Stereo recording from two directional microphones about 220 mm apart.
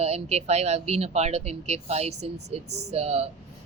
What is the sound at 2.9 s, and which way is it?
Speech, 30° right (ahead or behind).